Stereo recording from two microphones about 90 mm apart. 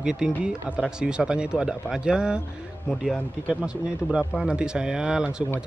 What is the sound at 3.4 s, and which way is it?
Speech, 10° right (ahead or behind).